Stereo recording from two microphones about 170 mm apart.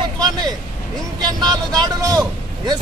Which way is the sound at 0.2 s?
25° right (ahead or behind).